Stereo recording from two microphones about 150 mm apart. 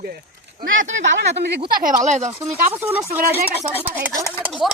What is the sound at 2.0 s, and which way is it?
Speech, 50° right (ahead or behind).